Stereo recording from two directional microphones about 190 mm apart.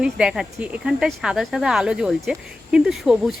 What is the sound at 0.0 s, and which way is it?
Speech, 5° right (ahead or behind).